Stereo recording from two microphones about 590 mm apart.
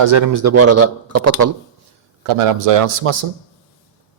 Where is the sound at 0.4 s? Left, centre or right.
Right.